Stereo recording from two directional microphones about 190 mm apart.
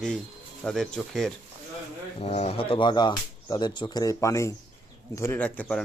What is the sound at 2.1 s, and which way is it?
Speech, 35° left (ahead or behind).